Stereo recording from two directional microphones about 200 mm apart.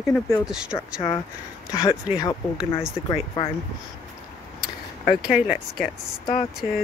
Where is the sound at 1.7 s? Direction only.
20° left (ahead or behind).